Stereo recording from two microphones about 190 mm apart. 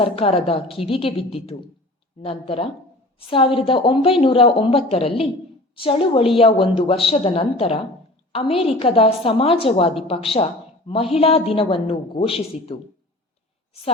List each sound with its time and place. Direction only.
0.0 s a woman's voice: 30° left (ahead or behind)